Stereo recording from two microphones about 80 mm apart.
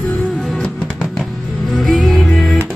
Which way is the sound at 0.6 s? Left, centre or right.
Centre.